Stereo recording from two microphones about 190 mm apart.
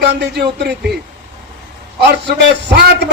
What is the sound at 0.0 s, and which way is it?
Speech, 65° right (ahead or behind).